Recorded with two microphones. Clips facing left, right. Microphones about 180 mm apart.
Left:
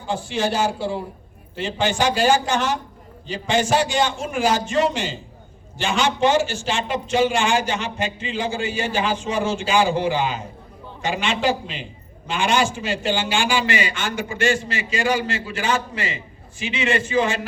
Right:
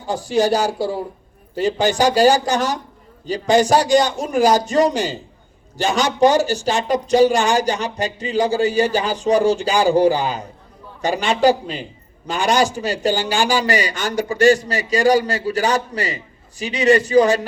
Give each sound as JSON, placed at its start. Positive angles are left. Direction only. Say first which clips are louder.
{"t": 0.1, "sound": "a man's voice", "louder": "right 6 dB", "side_deg": -40}